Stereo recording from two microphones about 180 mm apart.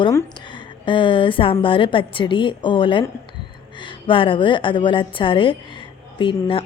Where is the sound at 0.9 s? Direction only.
25° left (ahead or behind).